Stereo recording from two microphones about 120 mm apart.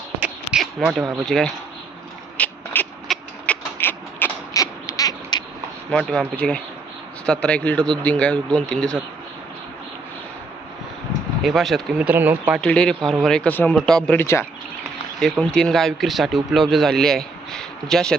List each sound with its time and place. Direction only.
0.6 s speech: centre (ahead or behind)
2.4 s a sound: 10° left (ahead or behind)
2.7 s mechanisms: 15° left (ahead or behind)
4.5 s a sound: 30° left (ahead or behind)
5.9 s speech: 5° left (ahead or behind)
11.4 s speech: centre (ahead or behind)
11.9 s speech: 15° right (ahead or behind)
12.5 s speech: 5° left (ahead or behind)
14.2 s speech: 20° left (ahead or behind)
15.2 s speech: 5° left (ahead or behind)